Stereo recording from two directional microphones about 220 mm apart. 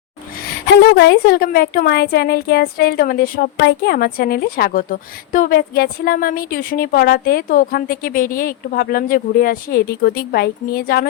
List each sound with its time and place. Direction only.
0.8 s a woman's voice: 50° left (ahead or behind)